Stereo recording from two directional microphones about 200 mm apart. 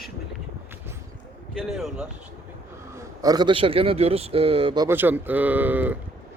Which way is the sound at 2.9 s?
15° right (ahead or behind).